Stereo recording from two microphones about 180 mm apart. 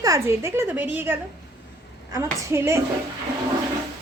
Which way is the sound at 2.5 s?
15° right (ahead or behind).